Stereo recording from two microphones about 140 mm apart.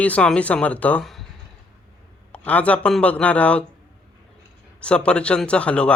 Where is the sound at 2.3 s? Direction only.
10° left (ahead or behind).